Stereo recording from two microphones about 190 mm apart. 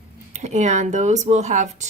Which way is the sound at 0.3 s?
40° right (ahead or behind).